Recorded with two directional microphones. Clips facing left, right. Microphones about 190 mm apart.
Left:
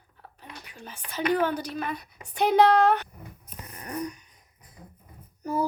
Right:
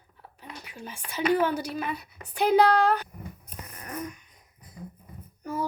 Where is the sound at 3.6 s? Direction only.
30° left (ahead or behind).